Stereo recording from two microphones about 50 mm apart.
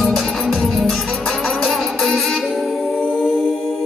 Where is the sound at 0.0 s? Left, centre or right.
Centre.